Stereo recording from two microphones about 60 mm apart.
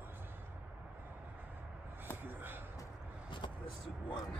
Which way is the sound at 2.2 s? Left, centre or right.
Right.